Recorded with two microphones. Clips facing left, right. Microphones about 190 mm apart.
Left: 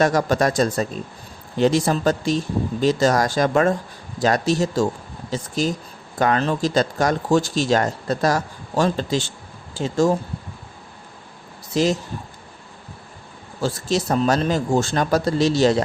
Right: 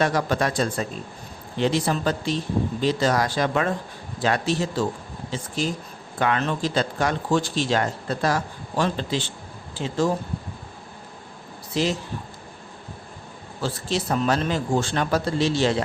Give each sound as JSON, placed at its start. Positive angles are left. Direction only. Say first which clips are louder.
{"t": 0.0, "sound": "speech", "louder": "left 4 dB", "side_deg": 45}
{"t": 11.7, "sound": "speech", "louder": "left 4 dB", "side_deg": 45}
{"t": 13.6, "sound": "speech", "louder": "left 4 dB", "side_deg": 40}